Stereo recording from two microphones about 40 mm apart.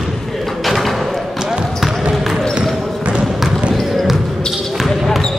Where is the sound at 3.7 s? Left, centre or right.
Centre.